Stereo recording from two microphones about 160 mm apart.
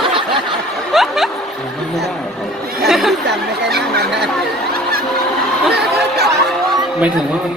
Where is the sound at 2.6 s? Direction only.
70° right (ahead or behind).